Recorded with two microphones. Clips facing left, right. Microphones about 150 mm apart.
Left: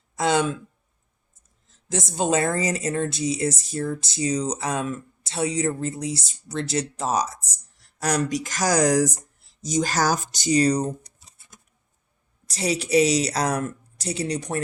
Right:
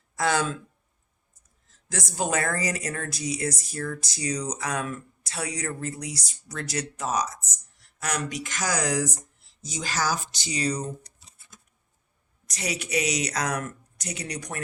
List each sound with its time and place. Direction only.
0.2 s a woman's voice: 20° left (ahead or behind)
1.9 s a woman's voice: 25° left (ahead or behind); by 10.9 s 40° left (ahead or behind)
12.5 s a woman's voice: 30° left (ahead or behind)